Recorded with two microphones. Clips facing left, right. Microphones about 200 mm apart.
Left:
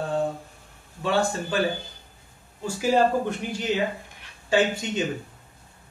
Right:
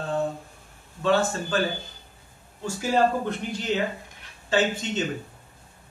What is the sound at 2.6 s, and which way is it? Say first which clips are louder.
Speech: left 1 dB; 10° left (ahead or behind).